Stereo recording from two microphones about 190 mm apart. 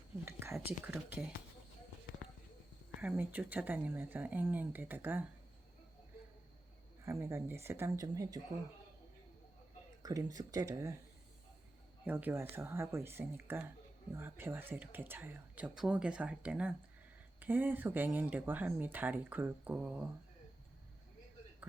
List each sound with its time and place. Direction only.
0.3 s a sound: 10° right (ahead or behind)
0.5 s speech: 5° right (ahead or behind)
3.0 s speech: 10° right (ahead or behind)
7.0 s speech: 15° right (ahead or behind)
10.0 s speech: 20° right (ahead or behind)
12.0 s speech: 10° right (ahead or behind)